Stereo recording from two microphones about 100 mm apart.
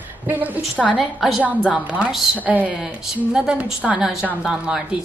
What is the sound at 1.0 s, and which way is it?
A woman's voice, centre (ahead or behind).